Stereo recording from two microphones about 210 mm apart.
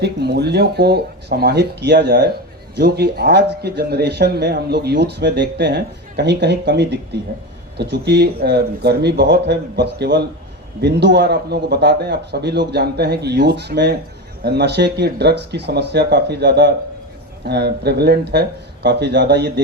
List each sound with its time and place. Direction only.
0.0 s a man's voice: 50° right (ahead or behind)